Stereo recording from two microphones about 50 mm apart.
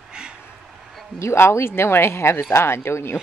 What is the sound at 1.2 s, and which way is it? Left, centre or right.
Speech, left.